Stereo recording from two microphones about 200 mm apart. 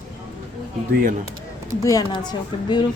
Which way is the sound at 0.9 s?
45° right (ahead or behind).